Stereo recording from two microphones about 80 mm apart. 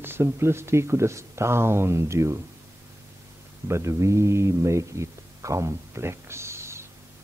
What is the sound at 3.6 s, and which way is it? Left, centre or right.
A man's voice, right.